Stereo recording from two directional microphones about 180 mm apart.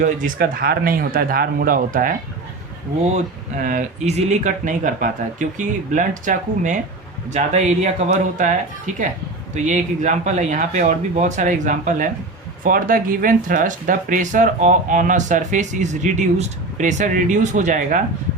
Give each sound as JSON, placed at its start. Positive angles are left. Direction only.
{"t": 0.0, "sound": "speech", "side_deg": -50}
{"t": 3.6, "sound": "speech", "side_deg": -45}
{"t": 9.6, "sound": "speech", "side_deg": -45}